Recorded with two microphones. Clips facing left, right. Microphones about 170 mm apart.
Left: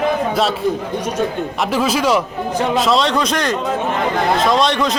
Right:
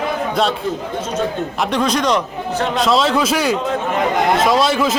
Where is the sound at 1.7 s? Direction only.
5° left (ahead or behind).